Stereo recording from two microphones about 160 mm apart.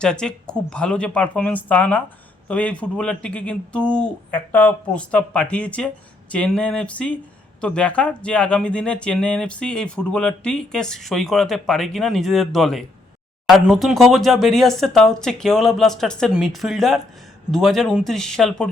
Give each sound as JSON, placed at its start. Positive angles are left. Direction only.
{"t": 0.0, "sound": "speech", "side_deg": 5}